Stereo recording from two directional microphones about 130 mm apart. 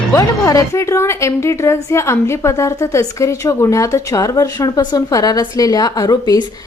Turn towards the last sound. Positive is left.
turn(degrees=30)  # may be behind; listen again after turning